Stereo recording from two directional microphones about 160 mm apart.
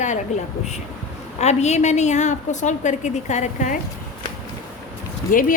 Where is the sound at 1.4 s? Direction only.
45° left (ahead or behind).